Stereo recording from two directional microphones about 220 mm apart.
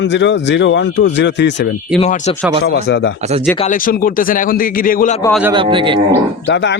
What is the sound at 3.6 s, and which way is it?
A man's voice, 40° left (ahead or behind).